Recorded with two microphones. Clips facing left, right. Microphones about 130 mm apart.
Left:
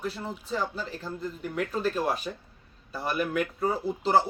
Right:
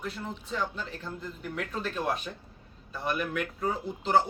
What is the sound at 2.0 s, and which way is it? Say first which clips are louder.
Speech: left 2 dB; 5° left (ahead or behind).